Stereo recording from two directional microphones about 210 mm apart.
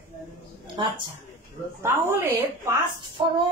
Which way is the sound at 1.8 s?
10° right (ahead or behind).